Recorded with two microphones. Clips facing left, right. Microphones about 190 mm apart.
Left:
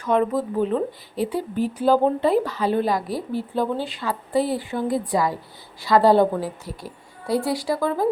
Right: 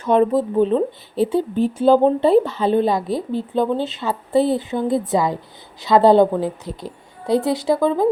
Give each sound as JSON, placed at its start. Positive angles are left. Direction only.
{"t": 0.0, "sound": "speech", "side_deg": -30}